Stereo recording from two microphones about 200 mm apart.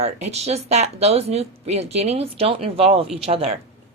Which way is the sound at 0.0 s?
35° right (ahead or behind).